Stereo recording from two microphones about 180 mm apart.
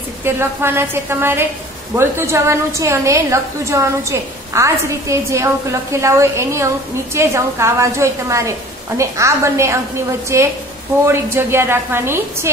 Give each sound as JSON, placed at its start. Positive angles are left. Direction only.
{"t": 0.2, "sound": "a woman's voice", "side_deg": -10}